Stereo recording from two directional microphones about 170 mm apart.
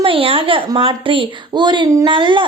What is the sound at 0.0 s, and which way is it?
A woman's voice, 30° right (ahead or behind).